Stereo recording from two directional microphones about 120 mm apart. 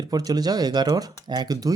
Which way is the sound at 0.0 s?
30° right (ahead or behind).